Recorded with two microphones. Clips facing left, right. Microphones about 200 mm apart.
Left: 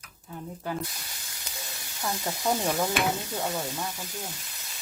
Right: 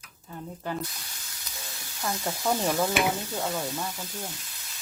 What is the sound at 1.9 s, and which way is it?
Speech, 20° left (ahead or behind).